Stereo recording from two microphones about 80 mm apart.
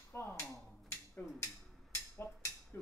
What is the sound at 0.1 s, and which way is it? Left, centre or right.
Mechanisms, left.